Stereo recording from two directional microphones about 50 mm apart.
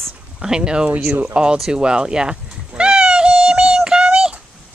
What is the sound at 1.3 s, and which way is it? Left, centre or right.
Speech, centre.